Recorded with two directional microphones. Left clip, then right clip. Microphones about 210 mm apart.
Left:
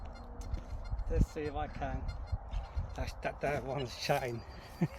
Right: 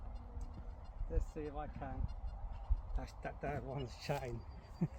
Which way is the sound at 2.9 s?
15° left (ahead or behind).